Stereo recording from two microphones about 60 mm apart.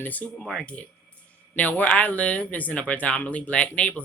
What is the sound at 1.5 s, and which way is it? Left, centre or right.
A woman's voice, left.